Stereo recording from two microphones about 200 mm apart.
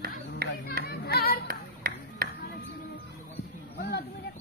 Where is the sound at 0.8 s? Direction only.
50° left (ahead or behind).